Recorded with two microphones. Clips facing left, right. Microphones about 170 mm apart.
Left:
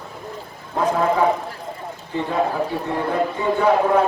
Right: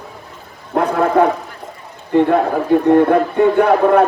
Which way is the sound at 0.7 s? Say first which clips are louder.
Right 5 dB; 65° right (ahead or behind).